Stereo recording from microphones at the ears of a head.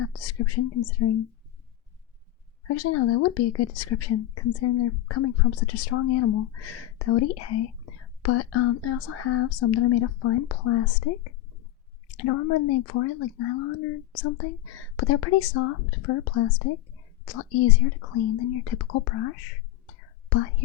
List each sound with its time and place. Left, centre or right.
0.0 s speech: left
2.6 s speech: left